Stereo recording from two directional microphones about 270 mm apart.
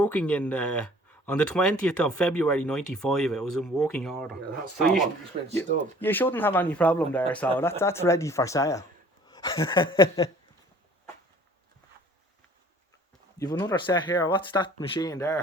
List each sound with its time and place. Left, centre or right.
0.0 s speech: centre
5.3 s speech: right
6.0 s speech: centre
13.4 s speech: centre